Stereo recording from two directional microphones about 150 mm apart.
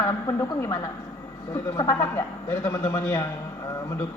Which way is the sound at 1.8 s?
15° left (ahead or behind).